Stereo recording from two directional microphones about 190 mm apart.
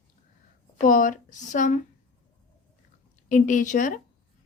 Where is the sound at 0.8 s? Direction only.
45° left (ahead or behind).